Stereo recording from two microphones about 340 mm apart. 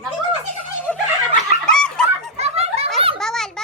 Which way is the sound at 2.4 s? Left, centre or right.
Centre.